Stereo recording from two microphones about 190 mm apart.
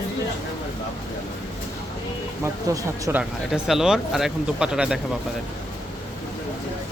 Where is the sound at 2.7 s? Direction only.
15° right (ahead or behind).